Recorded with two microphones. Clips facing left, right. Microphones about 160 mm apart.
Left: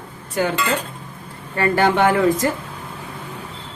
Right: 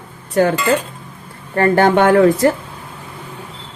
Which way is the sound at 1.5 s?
50° right (ahead or behind).